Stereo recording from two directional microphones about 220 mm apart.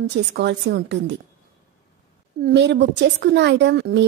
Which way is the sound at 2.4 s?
45° right (ahead or behind).